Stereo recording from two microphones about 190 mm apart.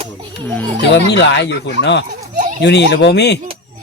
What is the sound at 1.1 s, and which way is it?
Speech, 65° left (ahead or behind).